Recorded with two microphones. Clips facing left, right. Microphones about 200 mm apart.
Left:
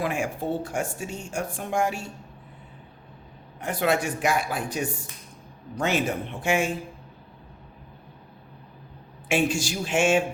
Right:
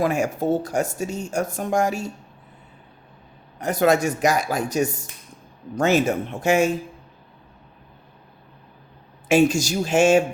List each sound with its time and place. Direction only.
0.0 s speech: 40° right (ahead or behind)
3.6 s speech: 40° right (ahead or behind)
9.3 s speech: 40° right (ahead or behind)